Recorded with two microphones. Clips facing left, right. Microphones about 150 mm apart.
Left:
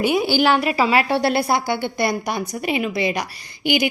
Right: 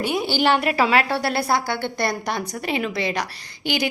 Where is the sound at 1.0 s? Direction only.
20° left (ahead or behind).